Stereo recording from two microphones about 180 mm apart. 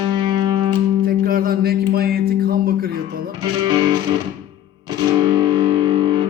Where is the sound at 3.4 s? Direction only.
25° right (ahead or behind).